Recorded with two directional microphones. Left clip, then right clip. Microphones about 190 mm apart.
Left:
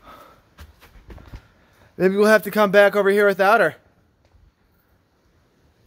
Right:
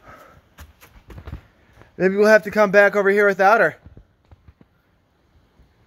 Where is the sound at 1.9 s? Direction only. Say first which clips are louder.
Right 1 dB; centre (ahead or behind).